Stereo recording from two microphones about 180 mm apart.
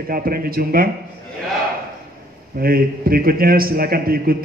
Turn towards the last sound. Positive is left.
turn(degrees=-55)  # may be behind; listen again after turning